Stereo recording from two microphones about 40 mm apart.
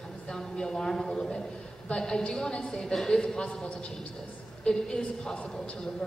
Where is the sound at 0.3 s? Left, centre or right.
Centre.